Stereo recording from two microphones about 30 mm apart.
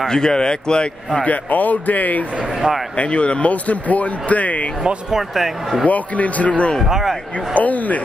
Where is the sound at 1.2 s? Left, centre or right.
Left.